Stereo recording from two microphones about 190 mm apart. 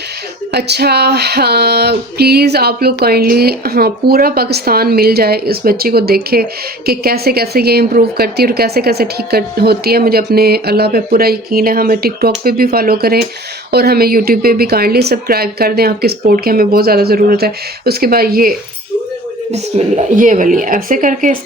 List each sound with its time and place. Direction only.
0.5 s a woman's voice: 60° right (ahead or behind)
19.5 s a woman's voice: 35° right (ahead or behind)